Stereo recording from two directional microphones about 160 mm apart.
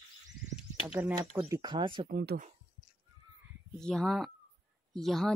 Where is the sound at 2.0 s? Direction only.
80° right.